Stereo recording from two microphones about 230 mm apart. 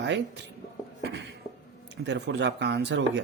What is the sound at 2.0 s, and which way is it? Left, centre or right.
Speech, right.